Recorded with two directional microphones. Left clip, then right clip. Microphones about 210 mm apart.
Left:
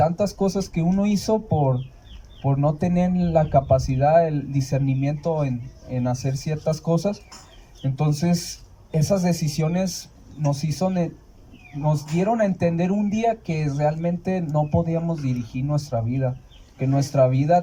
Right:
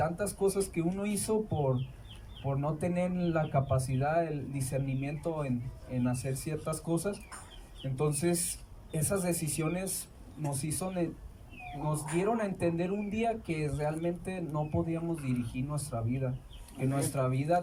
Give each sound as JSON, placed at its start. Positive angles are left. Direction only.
{"t": 0.0, "sound": "speech", "side_deg": 40}